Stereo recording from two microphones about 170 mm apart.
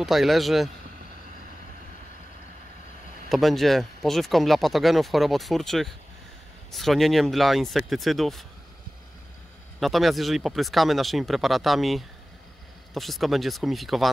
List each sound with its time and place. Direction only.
0.0 s speech: centre (ahead or behind)
3.3 s speech: centre (ahead or behind)
9.8 s speech: centre (ahead or behind)